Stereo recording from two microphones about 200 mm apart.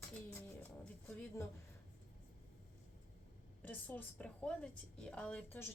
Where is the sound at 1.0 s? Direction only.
10° left (ahead or behind).